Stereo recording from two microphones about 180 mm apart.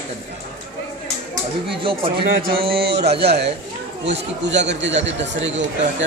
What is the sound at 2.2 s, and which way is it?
A man's voice, 55° right (ahead or behind).